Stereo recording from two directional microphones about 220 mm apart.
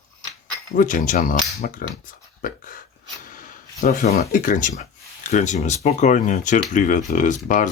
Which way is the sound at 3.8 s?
45° left (ahead or behind).